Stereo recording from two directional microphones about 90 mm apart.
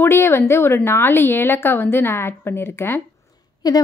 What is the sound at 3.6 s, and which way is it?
Speech, 45° left (ahead or behind).